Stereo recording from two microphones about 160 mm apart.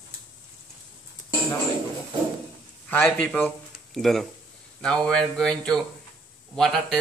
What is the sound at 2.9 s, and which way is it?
Speech, 10° left (ahead or behind).